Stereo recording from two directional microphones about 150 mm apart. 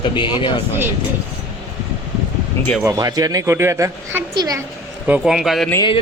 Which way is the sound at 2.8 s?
25° right (ahead or behind).